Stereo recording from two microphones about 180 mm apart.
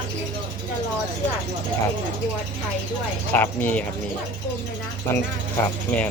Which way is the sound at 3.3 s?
10° left (ahead or behind).